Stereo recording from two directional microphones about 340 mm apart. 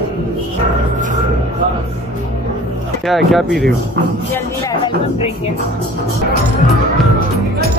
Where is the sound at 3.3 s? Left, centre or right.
Centre.